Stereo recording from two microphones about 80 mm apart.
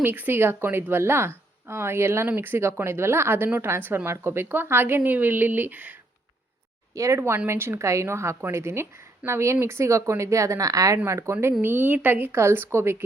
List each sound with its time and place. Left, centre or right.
0.0 s a woman's voice: right
2.2 s a woman's voice: right
6.9 s a woman's voice: right